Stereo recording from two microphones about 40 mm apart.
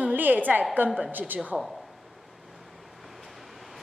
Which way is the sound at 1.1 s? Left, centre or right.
Right.